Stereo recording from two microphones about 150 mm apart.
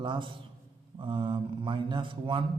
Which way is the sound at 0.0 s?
35° right (ahead or behind).